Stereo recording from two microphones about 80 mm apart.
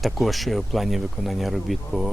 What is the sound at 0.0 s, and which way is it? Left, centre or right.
Speech, centre.